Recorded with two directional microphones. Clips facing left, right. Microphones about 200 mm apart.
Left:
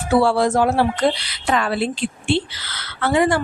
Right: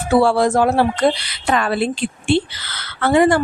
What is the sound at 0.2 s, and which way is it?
A woman's voice, 50° right (ahead or behind).